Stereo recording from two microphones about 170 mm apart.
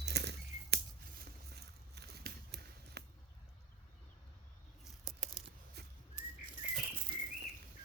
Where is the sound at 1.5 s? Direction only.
70° right (ahead or behind).